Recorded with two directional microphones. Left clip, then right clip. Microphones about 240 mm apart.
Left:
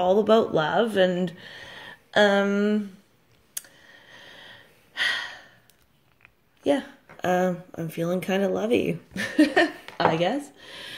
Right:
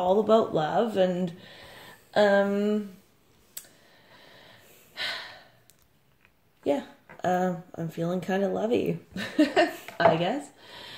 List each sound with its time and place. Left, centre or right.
0.0 s speech: left
4.3 s a sound: left
7.2 s a woman's voice: left